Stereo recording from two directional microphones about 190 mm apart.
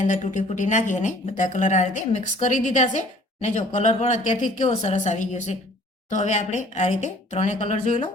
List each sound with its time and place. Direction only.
0.0 s speech: 40° left (ahead or behind)